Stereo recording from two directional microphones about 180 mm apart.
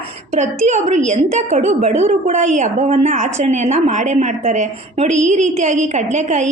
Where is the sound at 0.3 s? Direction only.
40° right (ahead or behind).